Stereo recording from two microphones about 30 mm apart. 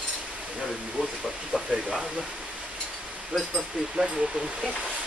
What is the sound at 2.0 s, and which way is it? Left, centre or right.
Speech, right.